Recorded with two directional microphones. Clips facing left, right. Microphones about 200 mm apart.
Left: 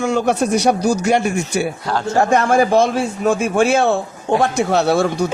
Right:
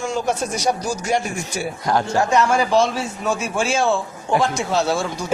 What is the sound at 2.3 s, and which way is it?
A man's voice, 55° left (ahead or behind).